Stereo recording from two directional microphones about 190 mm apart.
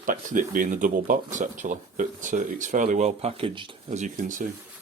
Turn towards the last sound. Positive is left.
turn(degrees=-45)  # may be behind; listen again after turning